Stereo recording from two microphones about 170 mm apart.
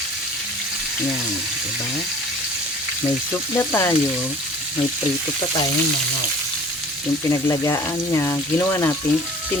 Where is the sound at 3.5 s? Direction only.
15° left (ahead or behind).